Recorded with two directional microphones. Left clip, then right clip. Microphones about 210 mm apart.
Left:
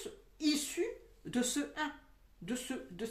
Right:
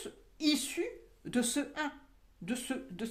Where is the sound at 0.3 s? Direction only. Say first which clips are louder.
Right 2 dB; 45° right (ahead or behind).